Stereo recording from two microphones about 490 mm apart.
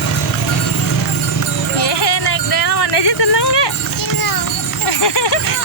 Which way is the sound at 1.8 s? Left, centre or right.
Left.